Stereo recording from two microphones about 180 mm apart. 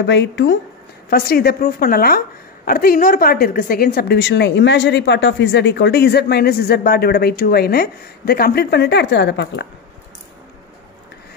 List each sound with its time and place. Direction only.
0.0 s speech: 80° left
1.1 s a woman's voice: 60° left (ahead or behind); by 9.7 s 75° left (ahead or behind)